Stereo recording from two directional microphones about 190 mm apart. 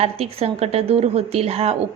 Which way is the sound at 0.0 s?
30° right (ahead or behind).